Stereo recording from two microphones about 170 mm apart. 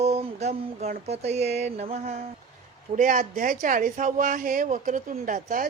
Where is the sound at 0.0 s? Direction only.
40° right (ahead or behind).